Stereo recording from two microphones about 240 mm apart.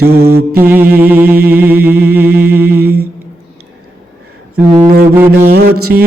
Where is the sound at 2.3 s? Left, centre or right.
Right.